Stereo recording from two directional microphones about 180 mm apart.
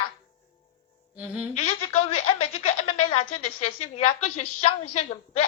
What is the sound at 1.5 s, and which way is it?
Speech, 35° left (ahead or behind).